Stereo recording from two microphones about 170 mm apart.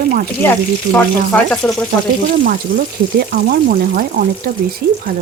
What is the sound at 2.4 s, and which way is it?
Speech, 60° right (ahead or behind).